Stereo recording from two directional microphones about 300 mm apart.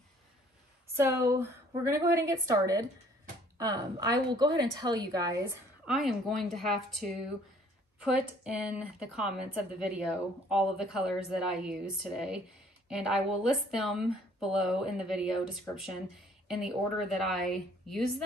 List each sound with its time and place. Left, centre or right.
0.9 s a woman's voice: centre
5.9 s a woman's voice: centre